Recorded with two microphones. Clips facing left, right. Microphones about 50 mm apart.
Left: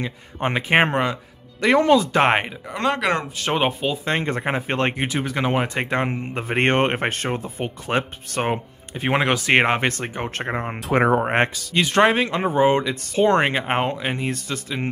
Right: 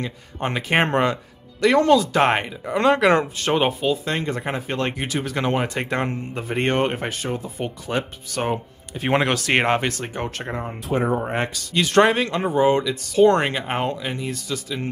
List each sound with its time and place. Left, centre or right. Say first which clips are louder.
0.0 s speech: left 2 dB; left
0.7 s speech: even; centre
1.6 s speech: even; centre
2.6 s speech: right 5 dB; centre
3.4 s speech: left 1 dB; centre
4.0 s speech: left 2 dB; left
5.0 s speech: left 1 dB; centre
6.3 s speech: left 3 dB; left
8.4 s speech: left 1 dB; left
9.0 s speech: even; centre
9.8 s speech: left 1 dB; left
10.9 s speech: left 4 dB; left
11.1 s speech: left 5 dB; left
11.7 s speech: right 1 dB; centre; by 14.9 s left